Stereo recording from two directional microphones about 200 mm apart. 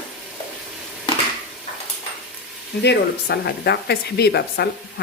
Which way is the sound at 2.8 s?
55° left (ahead or behind).